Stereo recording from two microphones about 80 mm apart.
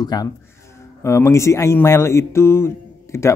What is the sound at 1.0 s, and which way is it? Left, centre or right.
Speech, left.